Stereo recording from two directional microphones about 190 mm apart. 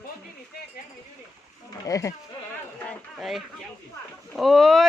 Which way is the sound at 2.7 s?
5° left (ahead or behind).